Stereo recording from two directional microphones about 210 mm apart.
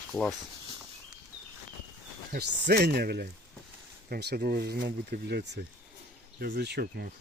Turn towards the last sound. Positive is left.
turn(degrees=-50)  # may be behind; listen again after turning